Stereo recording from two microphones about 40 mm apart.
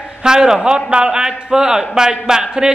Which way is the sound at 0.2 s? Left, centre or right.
Centre.